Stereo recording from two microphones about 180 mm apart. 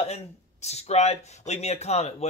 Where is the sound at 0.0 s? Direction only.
35° left (ahead or behind).